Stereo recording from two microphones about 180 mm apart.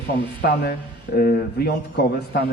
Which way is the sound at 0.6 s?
55° left (ahead or behind).